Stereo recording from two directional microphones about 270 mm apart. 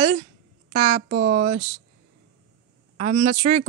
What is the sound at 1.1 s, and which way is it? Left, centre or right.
Speech, right.